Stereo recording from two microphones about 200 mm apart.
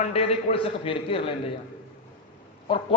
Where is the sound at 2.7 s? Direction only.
25° left (ahead or behind).